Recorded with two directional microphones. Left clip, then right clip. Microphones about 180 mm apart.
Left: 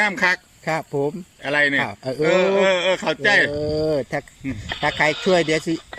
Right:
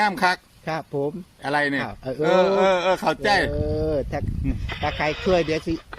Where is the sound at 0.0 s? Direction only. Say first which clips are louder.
Left 2 dB; 10° right (ahead or behind).